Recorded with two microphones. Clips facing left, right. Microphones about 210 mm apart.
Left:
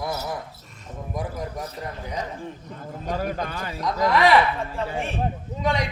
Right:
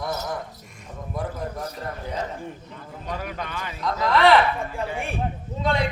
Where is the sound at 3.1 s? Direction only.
40° left (ahead or behind).